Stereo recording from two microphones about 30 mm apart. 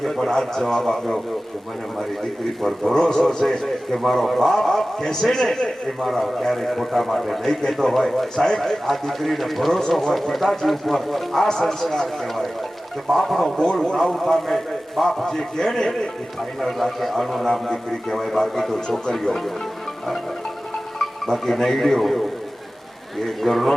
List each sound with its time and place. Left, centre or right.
0.0 s a man's voice: centre
2.6 s speech: centre
2.9 s a man's voice: centre
16.4 s a man's voice: centre
21.0 s speech: centre